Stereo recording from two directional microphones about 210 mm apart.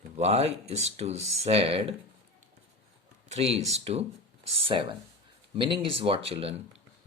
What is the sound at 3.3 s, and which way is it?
Speech, 30° right (ahead or behind).